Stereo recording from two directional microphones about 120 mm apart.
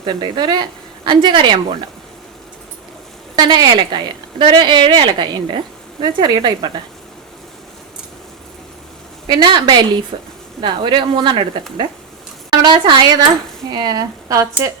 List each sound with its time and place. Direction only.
0.0 s speech: 40° right (ahead or behind)
3.3 s speech: 35° right (ahead or behind)
9.2 s speech: 40° right (ahead or behind)
12.6 s speech: 40° right (ahead or behind)